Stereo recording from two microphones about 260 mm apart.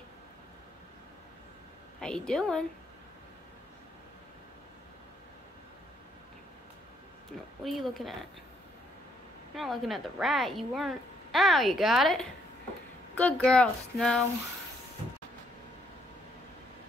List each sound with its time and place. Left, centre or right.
2.0 s a woman's voice: centre
7.6 s a woman's voice: centre
9.6 s a woman's voice: centre